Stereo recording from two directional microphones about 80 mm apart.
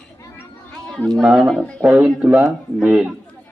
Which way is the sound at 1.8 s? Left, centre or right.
Centre.